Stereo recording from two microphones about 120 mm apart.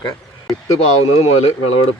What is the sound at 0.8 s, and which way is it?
Speech, 60° left (ahead or behind).